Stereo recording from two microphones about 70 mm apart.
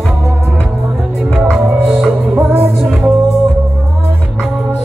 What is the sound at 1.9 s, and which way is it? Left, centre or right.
Music, centre.